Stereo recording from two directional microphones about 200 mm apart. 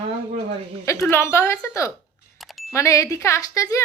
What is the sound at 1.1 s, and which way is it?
A woman's voice, 10° left (ahead or behind).